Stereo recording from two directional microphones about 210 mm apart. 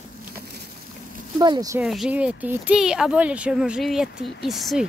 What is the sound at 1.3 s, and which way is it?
Speech, 20° right (ahead or behind).